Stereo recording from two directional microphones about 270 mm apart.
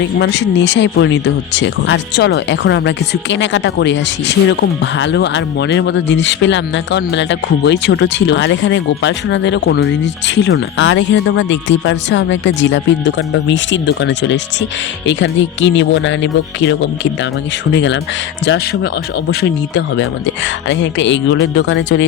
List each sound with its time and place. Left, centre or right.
0.0 s speech: left